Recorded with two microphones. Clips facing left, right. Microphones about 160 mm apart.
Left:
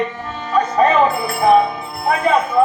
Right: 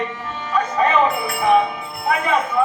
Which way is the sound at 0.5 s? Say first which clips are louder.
Left 4 dB; 35° left (ahead or behind).